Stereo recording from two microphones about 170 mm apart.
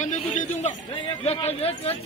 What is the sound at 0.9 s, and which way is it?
Speech, 30° left (ahead or behind).